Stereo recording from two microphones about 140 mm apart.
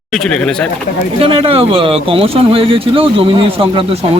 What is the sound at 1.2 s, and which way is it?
Speech, 40° right (ahead or behind).